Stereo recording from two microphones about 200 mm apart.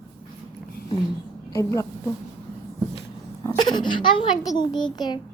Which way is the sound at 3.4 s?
20° left (ahead or behind).